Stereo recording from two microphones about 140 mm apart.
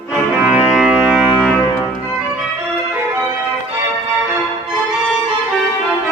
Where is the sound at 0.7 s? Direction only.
Centre (ahead or behind).